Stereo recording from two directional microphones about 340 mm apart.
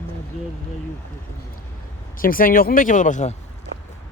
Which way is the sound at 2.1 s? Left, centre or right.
Left.